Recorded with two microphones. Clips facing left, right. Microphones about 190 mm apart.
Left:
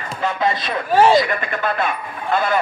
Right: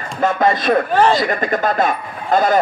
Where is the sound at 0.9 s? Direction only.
10° left (ahead or behind).